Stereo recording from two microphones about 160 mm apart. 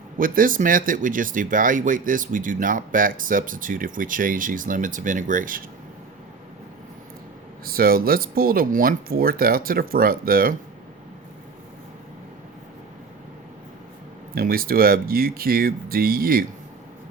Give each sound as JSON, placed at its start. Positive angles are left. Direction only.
{"t": 0.2, "sound": "speech", "side_deg": -60}
{"t": 7.6, "sound": "speech", "side_deg": -65}
{"t": 14.3, "sound": "speech", "side_deg": -65}